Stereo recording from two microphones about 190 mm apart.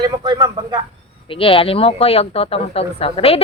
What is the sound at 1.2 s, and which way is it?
A woman's voice, 30° left (ahead or behind).